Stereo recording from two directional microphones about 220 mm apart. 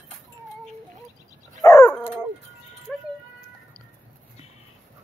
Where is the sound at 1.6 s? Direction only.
15° left (ahead or behind).